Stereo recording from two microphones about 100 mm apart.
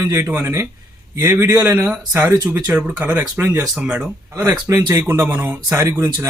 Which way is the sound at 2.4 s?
10° right (ahead or behind).